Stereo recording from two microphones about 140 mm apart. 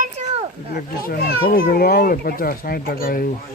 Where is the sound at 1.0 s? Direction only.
90° left.